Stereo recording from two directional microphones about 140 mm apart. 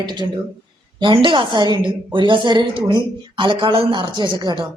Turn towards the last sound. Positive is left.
turn(degrees=-30)  # may be behind; listen again after turning